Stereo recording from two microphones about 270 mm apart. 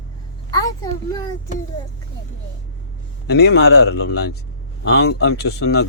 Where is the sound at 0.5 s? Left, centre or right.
Centre.